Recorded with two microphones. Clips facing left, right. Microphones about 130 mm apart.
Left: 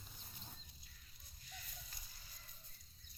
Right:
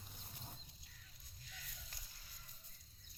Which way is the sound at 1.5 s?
90° right.